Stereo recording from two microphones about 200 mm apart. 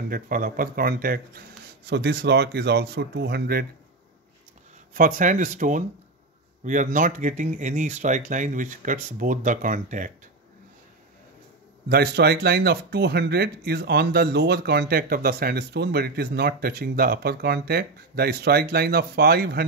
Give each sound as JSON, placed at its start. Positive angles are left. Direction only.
{"t": 0.1, "sound": "speech", "side_deg": -45}
{"t": 1.9, "sound": "speech", "side_deg": -55}
{"t": 4.9, "sound": "speech", "side_deg": -40}
{"t": 11.9, "sound": "speech", "side_deg": -55}